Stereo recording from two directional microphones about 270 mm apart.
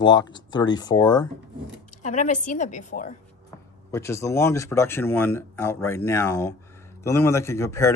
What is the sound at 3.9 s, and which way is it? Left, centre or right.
Speech, centre.